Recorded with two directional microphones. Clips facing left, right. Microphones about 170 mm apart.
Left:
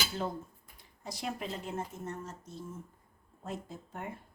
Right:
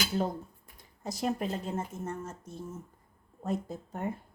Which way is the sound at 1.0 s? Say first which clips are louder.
Right 6 dB; 45° right (ahead or behind).